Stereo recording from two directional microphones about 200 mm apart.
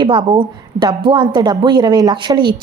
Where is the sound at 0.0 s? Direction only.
25° right (ahead or behind).